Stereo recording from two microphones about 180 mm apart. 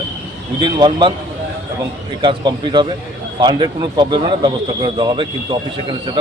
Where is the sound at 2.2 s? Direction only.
25° right (ahead or behind).